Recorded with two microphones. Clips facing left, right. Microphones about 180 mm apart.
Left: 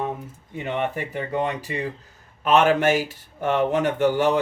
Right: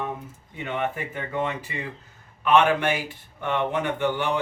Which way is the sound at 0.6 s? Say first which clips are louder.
Left 2 dB; 35° left (ahead or behind).